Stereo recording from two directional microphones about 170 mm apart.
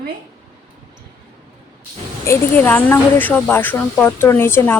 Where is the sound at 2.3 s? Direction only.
10° left (ahead or behind).